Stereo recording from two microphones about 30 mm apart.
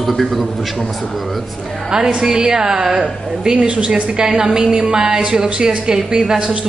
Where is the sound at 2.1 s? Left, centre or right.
Right.